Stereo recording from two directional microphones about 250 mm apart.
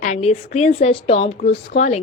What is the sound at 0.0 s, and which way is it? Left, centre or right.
A woman's voice, left.